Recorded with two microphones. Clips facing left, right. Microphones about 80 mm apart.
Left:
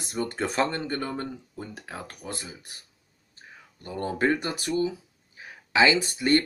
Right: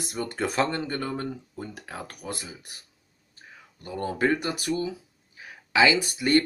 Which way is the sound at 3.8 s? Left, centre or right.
Left.